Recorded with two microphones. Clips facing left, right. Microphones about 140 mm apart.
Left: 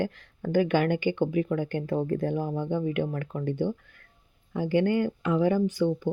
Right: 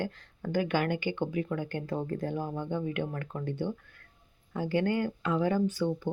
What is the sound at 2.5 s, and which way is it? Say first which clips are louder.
Speech: left 5 dB; 15° left (ahead or behind).